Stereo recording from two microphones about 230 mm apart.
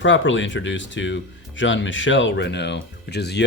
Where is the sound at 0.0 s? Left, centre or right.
Left.